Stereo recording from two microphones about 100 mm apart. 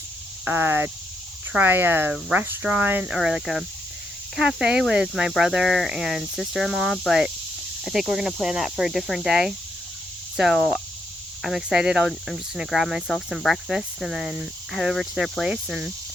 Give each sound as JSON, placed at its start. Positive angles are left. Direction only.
{"t": 0.4, "sound": "speech", "side_deg": -20}
{"t": 3.2, "sound": "speech", "side_deg": 0}